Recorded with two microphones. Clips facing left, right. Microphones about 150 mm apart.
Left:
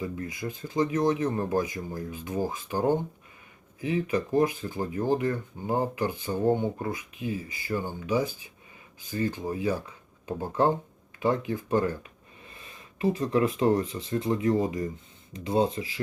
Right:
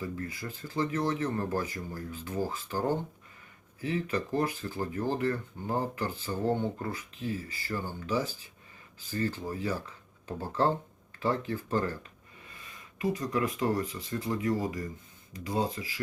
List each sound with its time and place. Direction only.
0.0 s speech: 15° left (ahead or behind)